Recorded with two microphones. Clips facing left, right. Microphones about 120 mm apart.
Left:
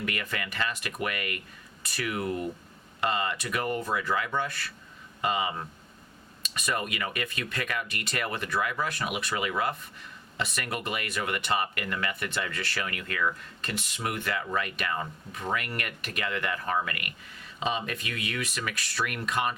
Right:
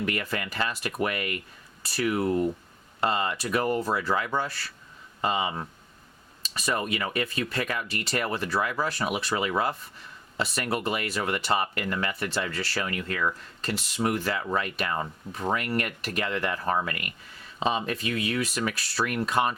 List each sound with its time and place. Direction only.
0.0 s speech: 30° right (ahead or behind)